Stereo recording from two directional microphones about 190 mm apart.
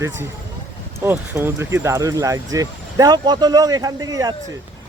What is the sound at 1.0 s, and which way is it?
Speech, 10° right (ahead or behind).